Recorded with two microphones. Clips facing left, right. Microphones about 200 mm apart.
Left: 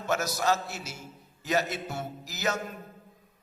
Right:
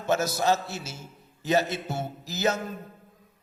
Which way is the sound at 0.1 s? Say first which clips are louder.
Right 3 dB; 25° right (ahead or behind).